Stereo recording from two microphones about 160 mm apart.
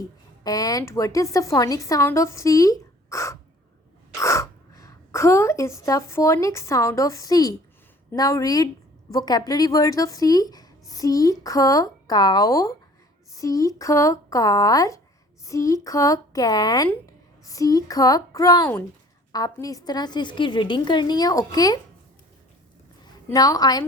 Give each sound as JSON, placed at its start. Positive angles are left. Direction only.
{"t": 0.4, "sound": "a woman's voice", "side_deg": 20}
{"t": 23.3, "sound": "speech", "side_deg": 25}